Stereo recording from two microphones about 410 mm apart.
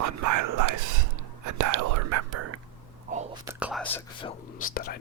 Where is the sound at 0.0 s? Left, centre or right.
Right.